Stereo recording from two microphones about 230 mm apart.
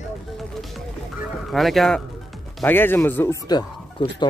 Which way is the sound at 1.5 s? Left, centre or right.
Centre.